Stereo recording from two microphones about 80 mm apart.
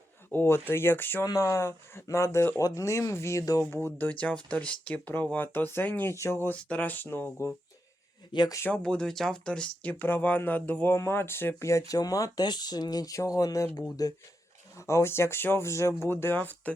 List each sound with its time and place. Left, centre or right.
0.3 s speech: left
1.2 s speech: left
2.6 s speech: left
3.7 s speech: left
6.5 s speech: centre
8.3 s speech: left
8.7 s speech: centre
9.9 s speech: left
10.9 s speech: left
12.5 s speech: left
13.1 s speech: left
14.8 s speech: left